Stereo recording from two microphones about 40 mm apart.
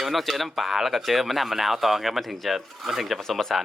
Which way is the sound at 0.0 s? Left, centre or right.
Centre.